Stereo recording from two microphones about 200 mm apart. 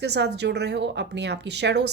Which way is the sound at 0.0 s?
55° right (ahead or behind).